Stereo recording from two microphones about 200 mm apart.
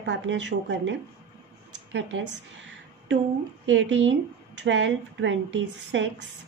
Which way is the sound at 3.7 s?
70° right (ahead or behind).